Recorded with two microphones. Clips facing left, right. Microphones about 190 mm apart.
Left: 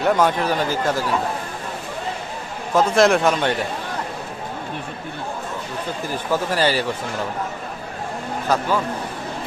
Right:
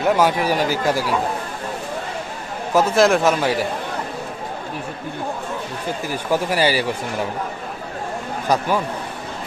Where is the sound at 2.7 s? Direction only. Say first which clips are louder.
Even; 5° right (ahead or behind).